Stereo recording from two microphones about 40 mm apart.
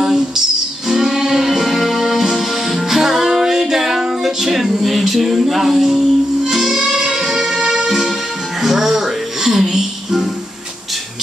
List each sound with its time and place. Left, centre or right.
0.8 s music: centre